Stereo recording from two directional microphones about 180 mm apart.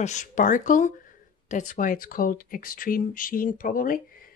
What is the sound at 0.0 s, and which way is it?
A woman's voice, 40° left (ahead or behind).